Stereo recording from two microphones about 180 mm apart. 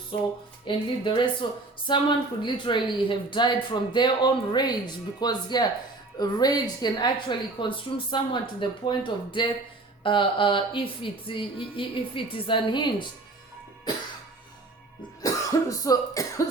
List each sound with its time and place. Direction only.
0.1 s speech: 30° left (ahead or behind)
15.2 s speech: 20° left (ahead or behind)